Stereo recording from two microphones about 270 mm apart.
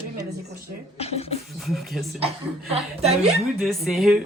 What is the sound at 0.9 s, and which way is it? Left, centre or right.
Speech, left.